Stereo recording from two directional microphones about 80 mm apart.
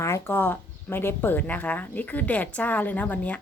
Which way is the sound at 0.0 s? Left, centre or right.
Left.